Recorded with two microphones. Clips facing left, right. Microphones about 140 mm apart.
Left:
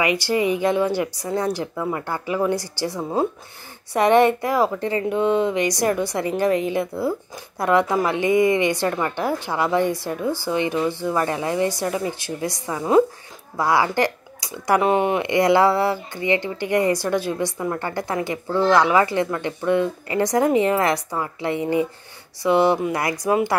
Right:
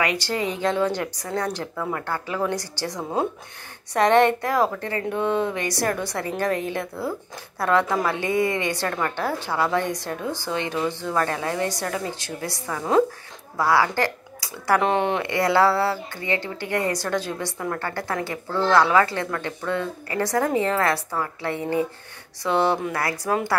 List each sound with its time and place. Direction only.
0.0 s speech: 10° left (ahead or behind)